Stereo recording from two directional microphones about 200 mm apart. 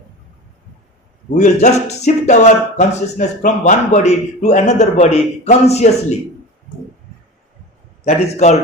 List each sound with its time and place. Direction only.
1.3 s speech: 35° left (ahead or behind)
8.0 s speech: 35° left (ahead or behind)